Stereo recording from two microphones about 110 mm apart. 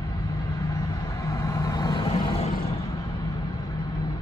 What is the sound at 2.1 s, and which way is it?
Vehicle, 60° left (ahead or behind).